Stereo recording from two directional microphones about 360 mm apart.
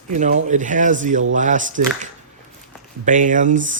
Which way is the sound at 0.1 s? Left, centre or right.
Centre.